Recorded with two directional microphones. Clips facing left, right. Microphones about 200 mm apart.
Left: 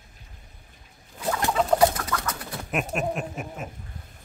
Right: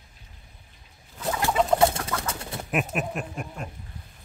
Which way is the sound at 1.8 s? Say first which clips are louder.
Left 1 dB; 25° right (ahead or behind).